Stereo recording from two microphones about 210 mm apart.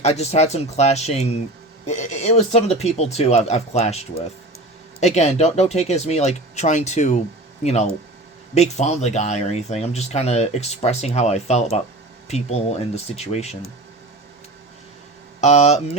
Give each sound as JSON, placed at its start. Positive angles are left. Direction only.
{"t": 0.0, "sound": "speech", "side_deg": 30}
{"t": 15.4, "sound": "speech", "side_deg": 35}